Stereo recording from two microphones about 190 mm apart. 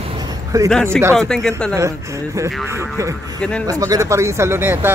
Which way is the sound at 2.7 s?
15° right (ahead or behind).